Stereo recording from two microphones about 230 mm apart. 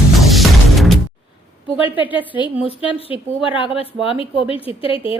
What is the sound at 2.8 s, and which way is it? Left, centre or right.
A woman's voice, left.